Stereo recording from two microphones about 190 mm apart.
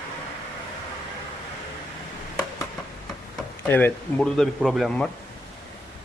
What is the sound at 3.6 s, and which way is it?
A man's voice, 10° left (ahead or behind).